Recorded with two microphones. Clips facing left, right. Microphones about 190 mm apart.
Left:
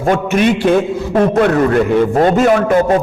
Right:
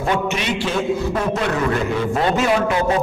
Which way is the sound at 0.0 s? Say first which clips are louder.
Left 8 dB; 50° left (ahead or behind).